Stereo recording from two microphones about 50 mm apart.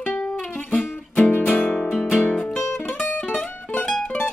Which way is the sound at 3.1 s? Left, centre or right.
Centre.